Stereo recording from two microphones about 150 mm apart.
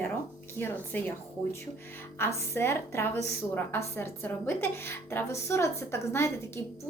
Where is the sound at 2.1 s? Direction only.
15° left (ahead or behind).